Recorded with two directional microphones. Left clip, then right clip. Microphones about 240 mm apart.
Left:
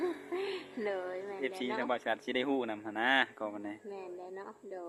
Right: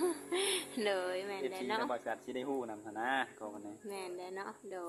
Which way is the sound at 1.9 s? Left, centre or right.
Left.